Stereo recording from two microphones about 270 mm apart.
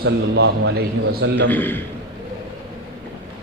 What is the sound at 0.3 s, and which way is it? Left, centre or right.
A man's voice, right.